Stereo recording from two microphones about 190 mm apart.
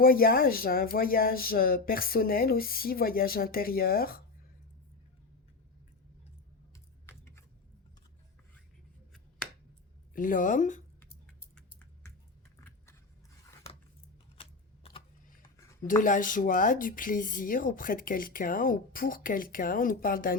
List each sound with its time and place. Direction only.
0.0 s speech: 50° left (ahead or behind)
6.7 s typing: 15° left (ahead or behind)
10.2 s speech: 45° left (ahead or behind)
11.5 s a sound: 5° left (ahead or behind)
12.5 s vehicle: 15° left (ahead or behind)
15.4 s a sound: 15° left (ahead or behind)
16.0 s speech: 45° left (ahead or behind)